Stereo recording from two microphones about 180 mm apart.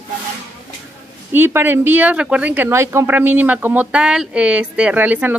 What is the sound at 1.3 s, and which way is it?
Speech, 10° right (ahead or behind).